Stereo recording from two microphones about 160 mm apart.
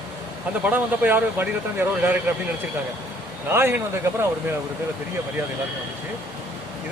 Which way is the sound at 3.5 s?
15° right (ahead or behind).